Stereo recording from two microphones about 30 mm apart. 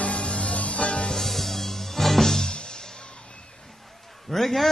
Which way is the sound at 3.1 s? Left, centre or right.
Left.